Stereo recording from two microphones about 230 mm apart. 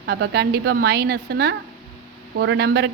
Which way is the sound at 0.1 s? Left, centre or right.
Right.